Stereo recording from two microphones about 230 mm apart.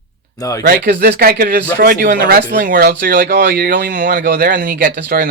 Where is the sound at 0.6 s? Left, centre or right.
Right.